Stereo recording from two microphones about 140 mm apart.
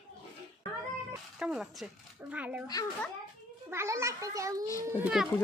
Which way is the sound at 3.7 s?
20° right (ahead or behind).